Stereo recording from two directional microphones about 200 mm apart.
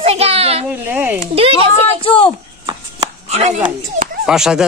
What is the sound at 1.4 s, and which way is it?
Speech, 30° right (ahead or behind).